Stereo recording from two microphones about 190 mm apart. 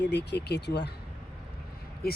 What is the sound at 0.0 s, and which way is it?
Speech, 60° left (ahead or behind).